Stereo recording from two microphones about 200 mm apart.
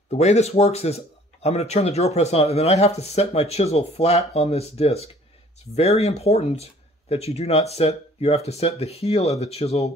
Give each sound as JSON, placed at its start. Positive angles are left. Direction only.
{"t": 0.1, "sound": "speech", "side_deg": 35}